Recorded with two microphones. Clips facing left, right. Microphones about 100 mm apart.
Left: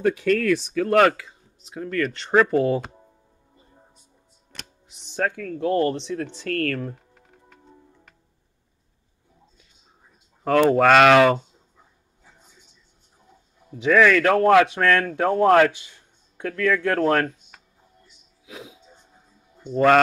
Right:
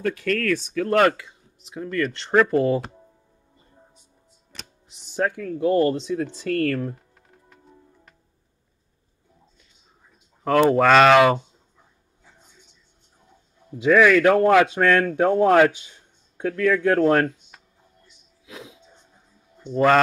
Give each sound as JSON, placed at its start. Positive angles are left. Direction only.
{"t": 0.0, "sound": "speech", "side_deg": 15}
{"t": 0.7, "sound": "speech", "side_deg": 0}
{"t": 4.5, "sound": "speech", "side_deg": 0}
{"t": 10.5, "sound": "speech", "side_deg": -5}
{"t": 13.8, "sound": "speech", "side_deg": -10}
{"t": 18.4, "sound": "music", "side_deg": 5}